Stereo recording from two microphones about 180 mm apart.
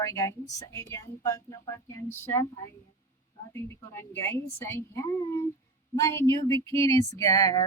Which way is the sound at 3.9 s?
15° left (ahead or behind).